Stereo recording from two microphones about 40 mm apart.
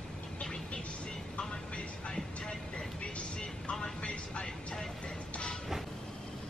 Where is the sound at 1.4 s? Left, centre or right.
Left.